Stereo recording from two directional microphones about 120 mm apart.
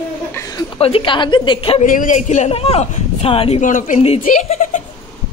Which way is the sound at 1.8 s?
90° left.